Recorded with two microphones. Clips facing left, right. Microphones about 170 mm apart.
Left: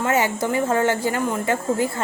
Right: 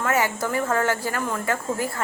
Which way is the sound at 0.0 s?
25° left (ahead or behind).